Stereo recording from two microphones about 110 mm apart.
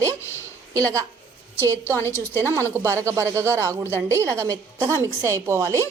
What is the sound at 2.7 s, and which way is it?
A woman's voice, 25° right (ahead or behind).